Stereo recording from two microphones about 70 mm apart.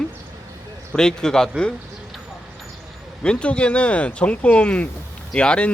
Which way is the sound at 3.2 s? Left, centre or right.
Centre.